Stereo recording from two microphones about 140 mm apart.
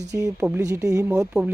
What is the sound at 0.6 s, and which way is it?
Speech, 25° right (ahead or behind).